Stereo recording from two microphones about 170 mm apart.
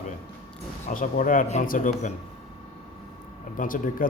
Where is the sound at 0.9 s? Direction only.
50° left (ahead or behind).